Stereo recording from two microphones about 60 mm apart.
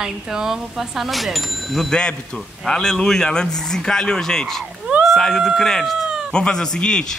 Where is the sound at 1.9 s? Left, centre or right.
Centre.